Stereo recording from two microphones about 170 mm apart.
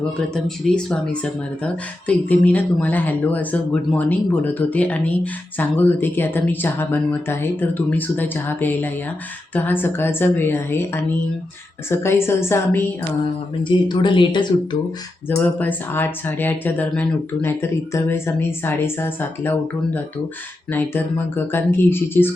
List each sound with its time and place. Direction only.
0.3 s speech: centre (ahead or behind)
13.7 s speech: 25° left (ahead or behind)
15.4 s speech: 10° left (ahead or behind)